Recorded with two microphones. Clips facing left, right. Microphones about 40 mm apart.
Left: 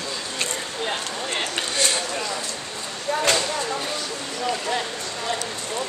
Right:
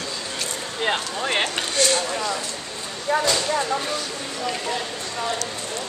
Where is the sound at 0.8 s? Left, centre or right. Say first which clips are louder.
Right 6 dB; right.